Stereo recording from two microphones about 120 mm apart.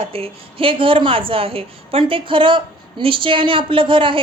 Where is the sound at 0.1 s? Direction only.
50° right (ahead or behind).